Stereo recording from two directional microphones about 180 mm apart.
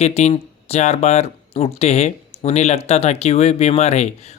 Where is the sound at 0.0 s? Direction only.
35° left (ahead or behind).